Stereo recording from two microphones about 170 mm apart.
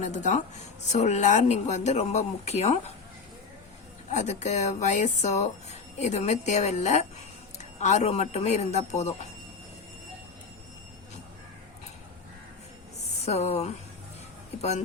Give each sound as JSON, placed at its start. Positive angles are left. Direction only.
{"t": 0.0, "sound": "speech", "side_deg": 45}
{"t": 4.1, "sound": "speech", "side_deg": 40}
{"t": 13.2, "sound": "speech", "side_deg": 40}